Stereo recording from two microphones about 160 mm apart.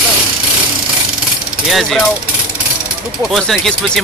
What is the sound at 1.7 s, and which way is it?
Speech, centre (ahead or behind).